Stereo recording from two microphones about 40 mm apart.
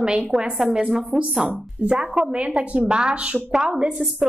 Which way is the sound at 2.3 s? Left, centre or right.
Right.